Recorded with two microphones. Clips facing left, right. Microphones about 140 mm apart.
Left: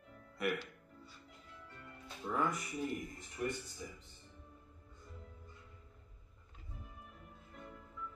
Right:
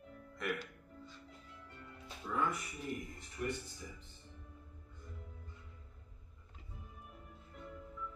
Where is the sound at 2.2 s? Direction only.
40° left (ahead or behind).